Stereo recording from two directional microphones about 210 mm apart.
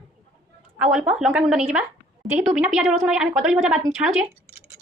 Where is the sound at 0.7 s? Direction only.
5° right (ahead or behind).